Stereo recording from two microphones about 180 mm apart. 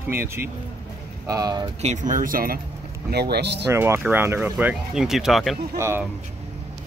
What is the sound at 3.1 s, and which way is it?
Speech, 65° right (ahead or behind).